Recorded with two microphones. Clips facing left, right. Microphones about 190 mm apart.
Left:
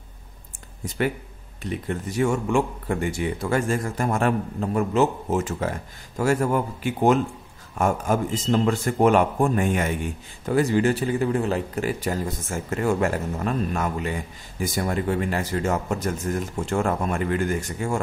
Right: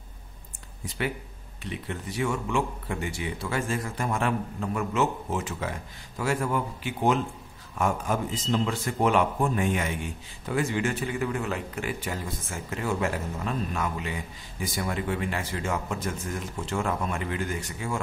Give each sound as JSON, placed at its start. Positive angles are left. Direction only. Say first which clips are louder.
{"t": 0.8, "sound": "speech", "louder": "left 6 dB", "side_deg": 45}
{"t": 10.4, "sound": "speech", "louder": "left 7 dB", "side_deg": 40}